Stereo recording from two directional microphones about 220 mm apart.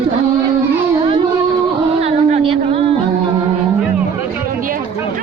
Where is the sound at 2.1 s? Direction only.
25° right (ahead or behind).